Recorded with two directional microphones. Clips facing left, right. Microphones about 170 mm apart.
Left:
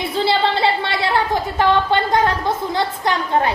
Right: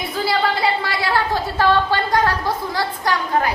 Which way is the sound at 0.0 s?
25° left (ahead or behind).